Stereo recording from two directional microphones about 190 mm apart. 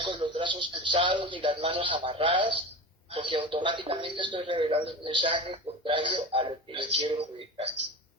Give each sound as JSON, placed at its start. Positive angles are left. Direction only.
{"t": 0.0, "sound": "a man's voice", "side_deg": -25}